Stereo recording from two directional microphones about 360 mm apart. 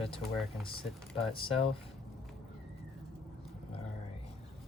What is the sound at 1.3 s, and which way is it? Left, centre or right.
Speech, centre.